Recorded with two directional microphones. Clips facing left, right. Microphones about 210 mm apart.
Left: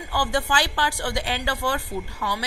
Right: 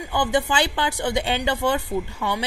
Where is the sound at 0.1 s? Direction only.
20° right (ahead or behind).